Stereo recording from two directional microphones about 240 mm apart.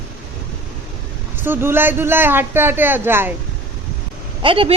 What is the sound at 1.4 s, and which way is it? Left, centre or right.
A man's voice, centre.